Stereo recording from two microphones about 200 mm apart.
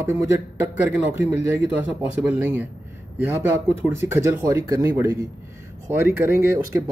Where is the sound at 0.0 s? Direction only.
15° right (ahead or behind).